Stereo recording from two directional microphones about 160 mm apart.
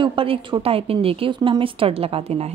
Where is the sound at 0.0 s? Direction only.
35° right (ahead or behind).